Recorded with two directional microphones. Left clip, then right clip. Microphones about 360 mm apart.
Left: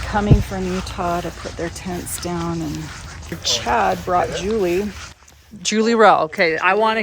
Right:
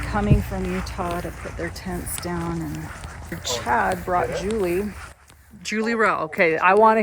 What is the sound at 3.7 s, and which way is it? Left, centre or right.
Speech, left.